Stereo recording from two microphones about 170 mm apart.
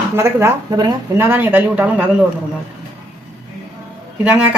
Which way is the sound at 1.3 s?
10° right (ahead or behind).